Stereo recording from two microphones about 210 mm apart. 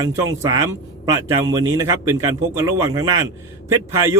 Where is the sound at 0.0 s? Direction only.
15° right (ahead or behind).